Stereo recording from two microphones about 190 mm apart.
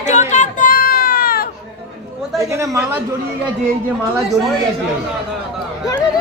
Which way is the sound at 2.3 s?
15° right (ahead or behind).